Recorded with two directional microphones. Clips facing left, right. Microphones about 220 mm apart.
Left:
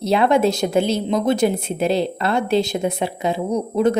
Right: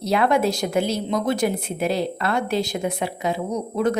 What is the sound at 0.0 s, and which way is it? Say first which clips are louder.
A woman's voice: left 3 dB; 25° left (ahead or behind).